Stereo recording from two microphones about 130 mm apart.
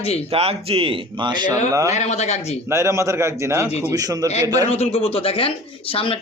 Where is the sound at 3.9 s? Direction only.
25° right (ahead or behind).